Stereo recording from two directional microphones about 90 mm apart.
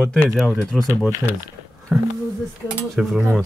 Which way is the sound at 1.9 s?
10° right (ahead or behind).